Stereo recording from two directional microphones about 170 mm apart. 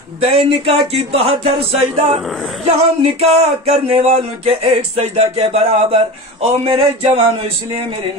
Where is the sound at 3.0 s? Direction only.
40° right (ahead or behind).